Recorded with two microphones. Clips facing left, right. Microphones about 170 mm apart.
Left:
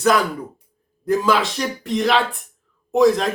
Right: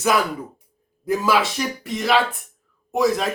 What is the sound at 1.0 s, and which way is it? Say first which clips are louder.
Speech: left 2 dB; 5° right (ahead or behind).